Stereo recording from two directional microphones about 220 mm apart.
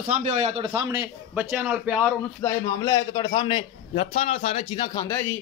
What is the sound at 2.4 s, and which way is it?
A man's voice, 15° left (ahead or behind).